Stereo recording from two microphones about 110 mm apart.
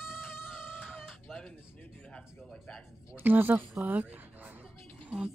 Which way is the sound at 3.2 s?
15° right (ahead or behind).